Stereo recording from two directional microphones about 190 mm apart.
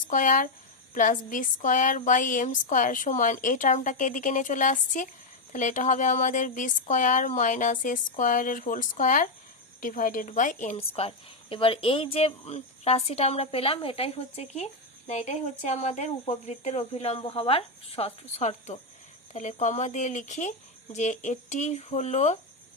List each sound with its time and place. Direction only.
0.1 s a woman's voice: 45° left (ahead or behind)